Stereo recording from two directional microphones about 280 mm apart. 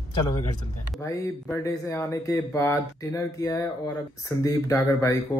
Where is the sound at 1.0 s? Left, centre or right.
Centre.